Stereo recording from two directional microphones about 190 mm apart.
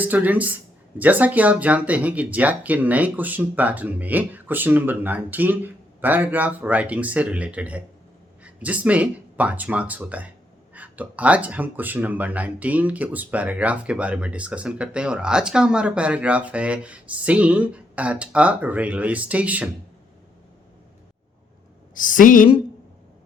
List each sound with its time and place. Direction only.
0.0 s speech: 10° right (ahead or behind)
21.9 s a woman's voice: 45° left (ahead or behind)